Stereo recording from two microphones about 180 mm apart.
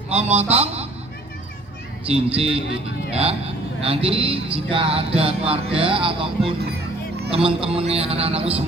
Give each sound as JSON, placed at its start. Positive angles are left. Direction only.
{"t": 0.1, "sound": "speech", "side_deg": -35}
{"t": 2.0, "sound": "speech", "side_deg": -35}
{"t": 6.6, "sound": "music", "side_deg": -60}
{"t": 7.3, "sound": "speech", "side_deg": -30}